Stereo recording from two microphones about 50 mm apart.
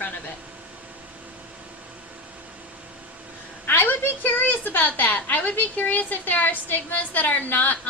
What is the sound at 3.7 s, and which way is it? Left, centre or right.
A woman's voice, left.